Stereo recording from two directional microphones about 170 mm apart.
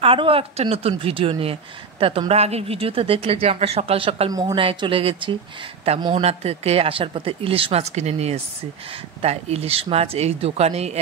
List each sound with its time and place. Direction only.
0.0 s speech: 30° right (ahead or behind)
4.3 s a woman's voice: 20° right (ahead or behind)
6.2 s speech: 40° right (ahead or behind)